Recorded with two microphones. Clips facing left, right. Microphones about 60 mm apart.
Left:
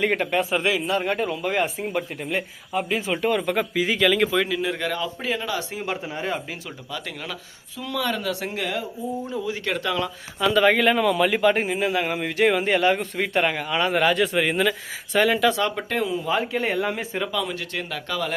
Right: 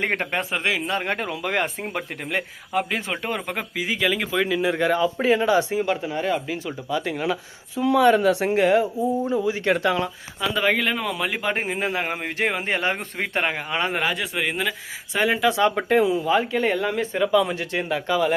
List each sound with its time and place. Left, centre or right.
0.0 s speech: right
3.1 s speech: right
3.5 s speech: centre
5.8 s speech: centre
6.9 s speech: centre
10.6 s speech: centre
11.7 s speech: right
14.0 s speech: centre
16.2 s speech: centre
17.3 s speech: right